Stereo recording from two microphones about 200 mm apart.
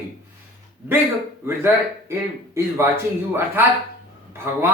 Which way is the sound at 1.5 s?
15° right (ahead or behind).